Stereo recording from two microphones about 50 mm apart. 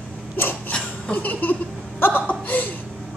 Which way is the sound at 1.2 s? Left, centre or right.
Left.